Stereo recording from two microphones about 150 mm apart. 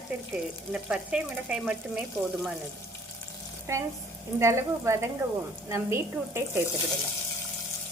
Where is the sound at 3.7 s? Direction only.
20° right (ahead or behind).